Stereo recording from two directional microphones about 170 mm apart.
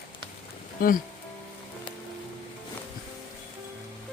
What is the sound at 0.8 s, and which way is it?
Speech, 60° left (ahead or behind).